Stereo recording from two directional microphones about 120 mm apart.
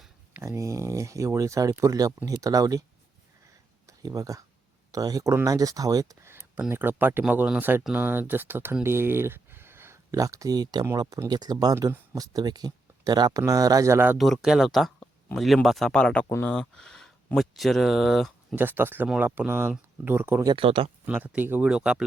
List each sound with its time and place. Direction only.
0.4 s speech: 25° right (ahead or behind)
3.8 s speech: 30° right (ahead or behind)
14.2 s speech: centre (ahead or behind)
18.5 s speech: 15° right (ahead or behind)
20.6 s speech: 50° right (ahead or behind)
21.1 s speech: 15° right (ahead or behind)